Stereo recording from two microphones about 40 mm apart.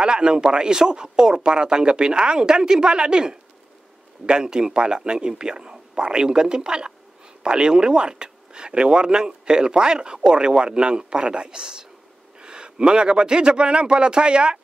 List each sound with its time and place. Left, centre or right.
0.0 s speech: right